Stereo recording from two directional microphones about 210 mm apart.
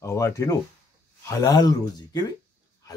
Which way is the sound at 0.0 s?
15° left (ahead or behind).